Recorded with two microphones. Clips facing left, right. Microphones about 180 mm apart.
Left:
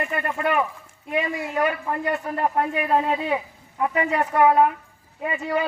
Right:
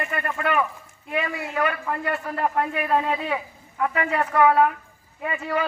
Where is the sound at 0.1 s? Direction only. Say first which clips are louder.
Left 1 dB; 25° left (ahead or behind).